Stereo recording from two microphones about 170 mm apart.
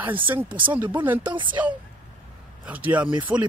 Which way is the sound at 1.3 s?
30° right (ahead or behind).